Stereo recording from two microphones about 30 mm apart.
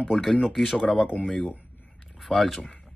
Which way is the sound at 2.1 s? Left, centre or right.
Centre.